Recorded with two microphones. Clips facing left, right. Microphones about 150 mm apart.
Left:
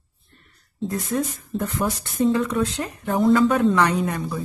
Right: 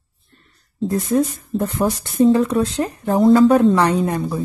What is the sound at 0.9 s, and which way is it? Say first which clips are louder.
Speech: right 7 dB; 35° right (ahead or behind).